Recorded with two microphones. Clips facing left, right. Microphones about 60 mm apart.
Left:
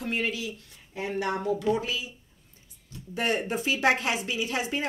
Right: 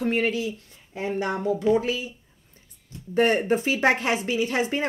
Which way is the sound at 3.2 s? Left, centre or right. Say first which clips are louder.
Right 7 dB; right.